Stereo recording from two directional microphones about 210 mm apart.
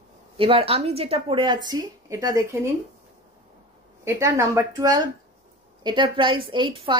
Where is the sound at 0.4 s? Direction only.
25° right (ahead or behind).